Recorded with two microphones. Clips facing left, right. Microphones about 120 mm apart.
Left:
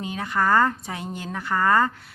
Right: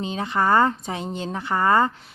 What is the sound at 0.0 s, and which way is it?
A woman's voice, 25° right (ahead or behind).